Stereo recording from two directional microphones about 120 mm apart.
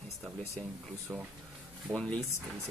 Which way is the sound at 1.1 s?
20° right (ahead or behind).